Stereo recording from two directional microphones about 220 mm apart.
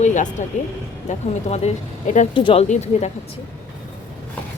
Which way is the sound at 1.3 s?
30° left (ahead or behind).